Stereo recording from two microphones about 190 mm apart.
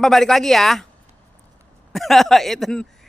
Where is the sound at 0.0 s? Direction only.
Centre (ahead or behind).